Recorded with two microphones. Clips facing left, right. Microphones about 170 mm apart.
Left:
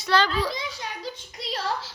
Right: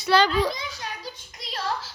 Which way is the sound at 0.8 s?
25° left (ahead or behind).